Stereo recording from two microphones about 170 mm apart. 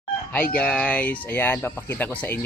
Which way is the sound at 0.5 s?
5° left (ahead or behind).